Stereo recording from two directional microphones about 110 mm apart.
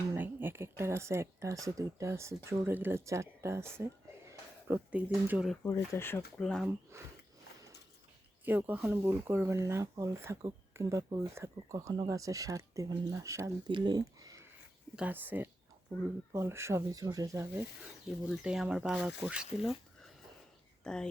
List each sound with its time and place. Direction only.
0.2 s speech: 20° right (ahead or behind)
4.9 s speech: 15° right (ahead or behind)
5.6 s speech: 30° left (ahead or behind)
6.3 s speech: 5° left (ahead or behind)
8.4 s speech: 20° right (ahead or behind)
12.9 s speech: 45° right (ahead or behind)
13.1 s speech: 25° right (ahead or behind)
13.7 s speech: 45° right (ahead or behind)
14.9 s speech: 15° right (ahead or behind)
18.3 s speech: 5° right (ahead or behind)
20.8 s speech: 5° left (ahead or behind)